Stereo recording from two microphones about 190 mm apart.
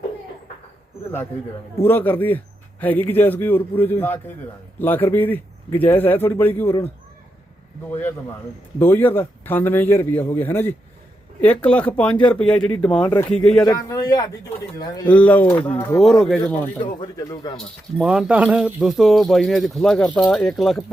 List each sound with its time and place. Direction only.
1.8 s a man's voice: 10° left (ahead or behind)
8.8 s a man's voice: 10° left (ahead or behind)
13.1 s a man's voice: 20° left (ahead or behind)
13.3 s speech: 5° left (ahead or behind)
13.6 s a man's voice: 20° left (ahead or behind)
15.1 s a man's voice: 10° left (ahead or behind)
17.0 s a man's voice: 20° left (ahead or behind)
17.9 s speech: 5° right (ahead or behind)